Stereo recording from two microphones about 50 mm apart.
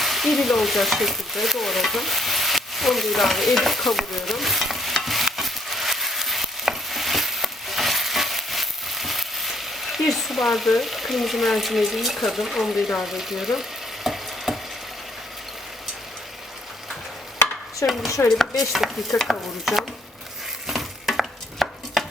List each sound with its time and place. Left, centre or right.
0.0 s stir: centre
17.8 s speech: left
18.3 s stir: centre
20.7 s stir: centre